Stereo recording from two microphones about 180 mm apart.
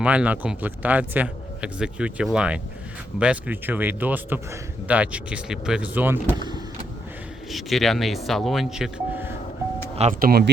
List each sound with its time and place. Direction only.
0.0 s a man's voice: 5° right (ahead or behind)
7.5 s speech: centre (ahead or behind)
9.9 s speech: 35° right (ahead or behind)
10.2 s speech: 55° right (ahead or behind)